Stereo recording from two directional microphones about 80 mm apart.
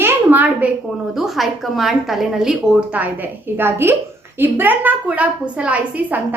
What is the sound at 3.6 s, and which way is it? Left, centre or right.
A woman's voice, right.